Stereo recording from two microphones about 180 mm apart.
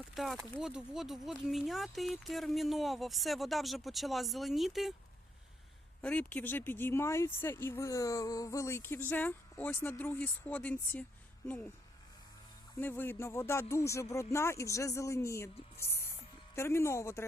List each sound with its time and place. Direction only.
0.1 s speech: centre (ahead or behind)
6.0 s speech: 5° left (ahead or behind)
12.8 s speech: 10° left (ahead or behind)
16.6 s speech: 15° left (ahead or behind)